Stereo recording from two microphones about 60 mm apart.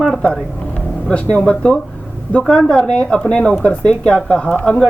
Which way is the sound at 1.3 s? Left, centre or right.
Centre.